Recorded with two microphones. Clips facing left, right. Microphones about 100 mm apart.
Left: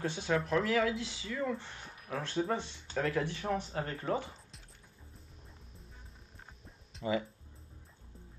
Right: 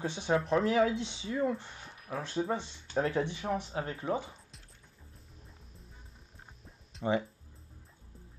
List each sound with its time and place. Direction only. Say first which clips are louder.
0.0 s speech: right 2 dB; 20° right (ahead or behind)
1.8 s a sound: right 1 dB; centre (ahead or behind)
2.2 s speech: even; 10° right (ahead or behind)
6.6 s music: right 4 dB; centre (ahead or behind)